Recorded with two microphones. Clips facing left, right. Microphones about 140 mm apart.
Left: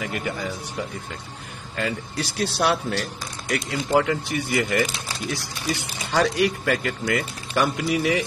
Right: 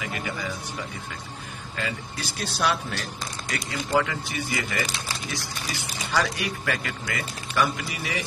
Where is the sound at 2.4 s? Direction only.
60° left (ahead or behind).